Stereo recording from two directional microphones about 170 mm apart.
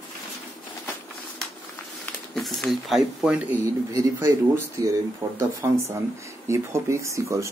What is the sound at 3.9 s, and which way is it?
Speech, 15° right (ahead or behind).